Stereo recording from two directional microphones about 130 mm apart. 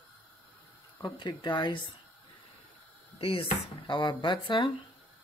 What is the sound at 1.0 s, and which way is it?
Speech, 40° left (ahead or behind).